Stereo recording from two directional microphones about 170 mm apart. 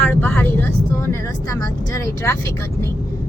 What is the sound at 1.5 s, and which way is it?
Speech, 20° left (ahead or behind).